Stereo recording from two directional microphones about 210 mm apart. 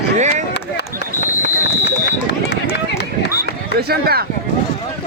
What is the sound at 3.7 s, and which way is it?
Speech, 50° right (ahead or behind).